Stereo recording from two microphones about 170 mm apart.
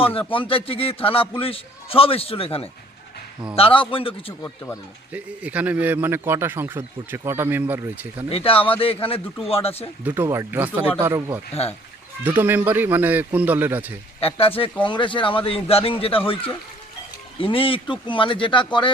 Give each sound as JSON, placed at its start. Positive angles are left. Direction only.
{"t": 0.0, "sound": "a man's voice", "side_deg": 30}
{"t": 5.1, "sound": "speech", "side_deg": -10}
{"t": 8.3, "sound": "a man's voice", "side_deg": 35}
{"t": 10.0, "sound": "speech", "side_deg": -10}
{"t": 12.4, "sound": "speech", "side_deg": -10}
{"t": 14.2, "sound": "a man's voice", "side_deg": 35}